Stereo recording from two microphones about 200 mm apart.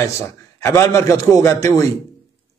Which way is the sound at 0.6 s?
15° left (ahead or behind).